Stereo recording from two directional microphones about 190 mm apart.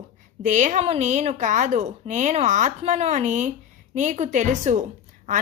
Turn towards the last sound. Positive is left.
turn(degrees=-40)  # may be behind; listen again after turning